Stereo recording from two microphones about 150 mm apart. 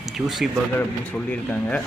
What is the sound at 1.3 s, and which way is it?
Speech, 10° left (ahead or behind).